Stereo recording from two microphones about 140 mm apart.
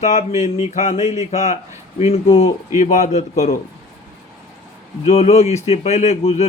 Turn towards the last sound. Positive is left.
turn(degrees=50)  # may be behind; listen again after turning